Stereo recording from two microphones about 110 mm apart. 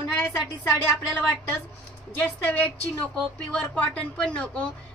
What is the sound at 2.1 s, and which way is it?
Speech, 20° left (ahead or behind).